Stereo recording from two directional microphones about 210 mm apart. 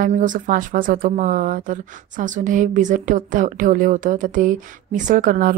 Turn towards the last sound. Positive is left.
turn(degrees=-40)  # may be behind; listen again after turning